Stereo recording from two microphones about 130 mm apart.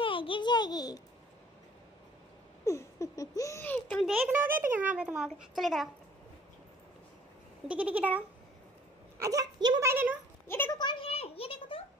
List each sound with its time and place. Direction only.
0.0 s a sound: 40° left (ahead or behind)
2.6 s laughter: 25° left (ahead or behind)
3.6 s a sound: 10° left (ahead or behind)
4.3 s a child's voice: 15° right (ahead or behind)
7.6 s a child's voice: 10° right (ahead or behind)
9.2 s a woman's voice: 25° right (ahead or behind)
9.8 s a child's voice: 15° right (ahead or behind)
10.5 s speech: 20° left (ahead or behind)
10.8 s a sound: 40° left (ahead or behind)